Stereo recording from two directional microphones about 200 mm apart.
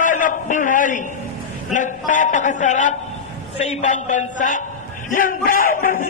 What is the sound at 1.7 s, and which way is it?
A man's voice, 40° left (ahead or behind).